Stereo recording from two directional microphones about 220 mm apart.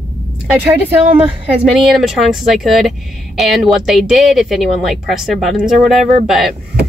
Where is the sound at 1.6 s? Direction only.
Centre (ahead or behind).